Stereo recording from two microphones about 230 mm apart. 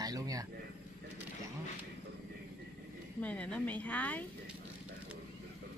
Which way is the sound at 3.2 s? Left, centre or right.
Centre.